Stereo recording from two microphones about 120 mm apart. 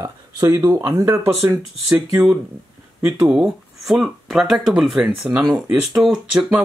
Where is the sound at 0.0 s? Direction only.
30° right (ahead or behind).